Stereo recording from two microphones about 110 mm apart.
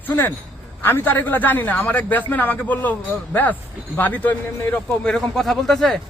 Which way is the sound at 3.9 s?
15° left (ahead or behind).